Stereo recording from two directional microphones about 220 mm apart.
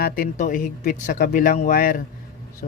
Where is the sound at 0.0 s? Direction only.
40° left (ahead or behind).